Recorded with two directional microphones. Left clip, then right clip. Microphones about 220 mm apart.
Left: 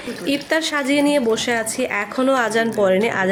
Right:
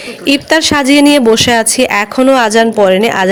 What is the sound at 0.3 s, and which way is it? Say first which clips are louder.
Speech: right 11 dB; 40° right (ahead or behind).